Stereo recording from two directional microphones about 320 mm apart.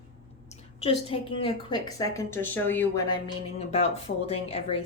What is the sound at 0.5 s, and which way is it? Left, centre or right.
A woman's voice, centre.